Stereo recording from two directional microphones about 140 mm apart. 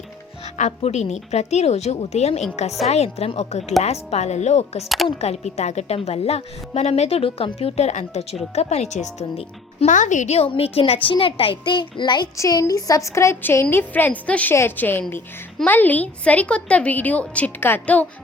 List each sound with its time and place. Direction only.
0.5 s a woman's voice: 55° left (ahead or behind); by 18.0 s 15° left (ahead or behind)